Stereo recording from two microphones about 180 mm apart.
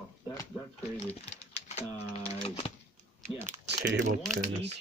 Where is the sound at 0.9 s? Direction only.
35° left (ahead or behind).